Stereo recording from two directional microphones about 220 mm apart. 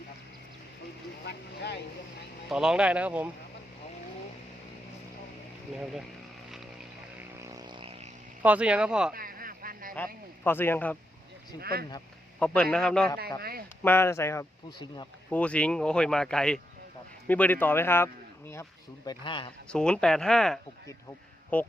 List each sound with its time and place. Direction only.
1.3 s vehicle: 50° left (ahead or behind)
2.5 s speech: 5° right (ahead or behind)
5.7 s speech: centre (ahead or behind)
7.2 s vehicle: 15° right (ahead or behind)
8.4 s speech: 5° right (ahead or behind)
9.1 s a sound: 40° right (ahead or behind)
10.4 s speech: 10° left (ahead or behind)
11.6 s speech: 45° right (ahead or behind)
12.4 s speech: 5° left (ahead or behind)
13.4 s a sound: 45° right (ahead or behind)
13.8 s speech: 10° left (ahead or behind)
15.3 s speech: 5° left (ahead or behind)
19.0 s speech: 20° left (ahead or behind)
19.6 s speech: 5° left (ahead or behind)